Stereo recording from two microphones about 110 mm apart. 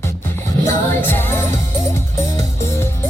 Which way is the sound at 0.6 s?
20° left (ahead or behind).